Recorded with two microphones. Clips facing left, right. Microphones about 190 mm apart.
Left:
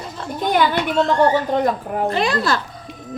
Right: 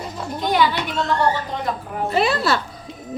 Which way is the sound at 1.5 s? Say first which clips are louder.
Left 7 dB; 50° left (ahead or behind).